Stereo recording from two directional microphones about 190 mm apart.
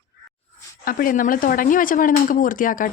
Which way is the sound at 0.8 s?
50° left (ahead or behind).